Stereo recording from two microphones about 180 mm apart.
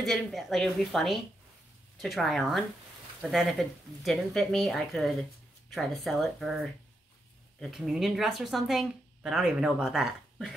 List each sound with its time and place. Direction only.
0.0 s a woman's voice: centre (ahead or behind)
7.7 s a woman's voice: centre (ahead or behind)